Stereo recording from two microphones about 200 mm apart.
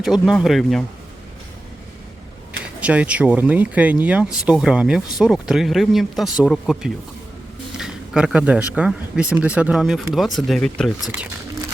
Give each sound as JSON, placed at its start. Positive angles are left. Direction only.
{"t": 0.0, "sound": "speech", "side_deg": 0}
{"t": 2.5, "sound": "speech", "side_deg": -5}